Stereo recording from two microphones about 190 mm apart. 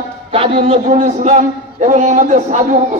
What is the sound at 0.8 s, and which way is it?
A man's voice, 40° right (ahead or behind).